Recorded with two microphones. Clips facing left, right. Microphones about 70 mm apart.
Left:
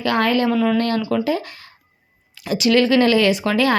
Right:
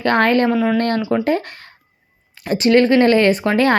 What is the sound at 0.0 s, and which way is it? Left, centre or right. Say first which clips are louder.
Speech: right 3 dB; right.